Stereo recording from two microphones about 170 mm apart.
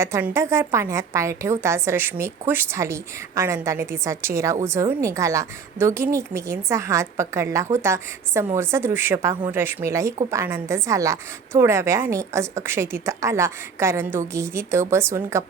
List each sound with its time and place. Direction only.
0.0 s a woman's voice: 15° right (ahead or behind)